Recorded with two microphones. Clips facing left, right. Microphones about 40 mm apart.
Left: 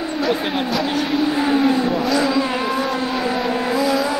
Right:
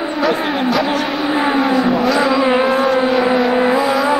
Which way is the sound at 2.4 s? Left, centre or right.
Right.